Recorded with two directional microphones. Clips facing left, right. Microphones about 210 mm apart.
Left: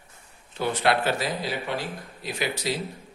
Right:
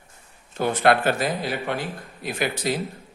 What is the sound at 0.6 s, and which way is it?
A man's voice, 50° right (ahead or behind).